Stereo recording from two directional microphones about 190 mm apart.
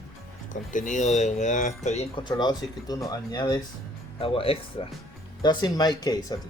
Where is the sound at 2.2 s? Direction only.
20° left (ahead or behind).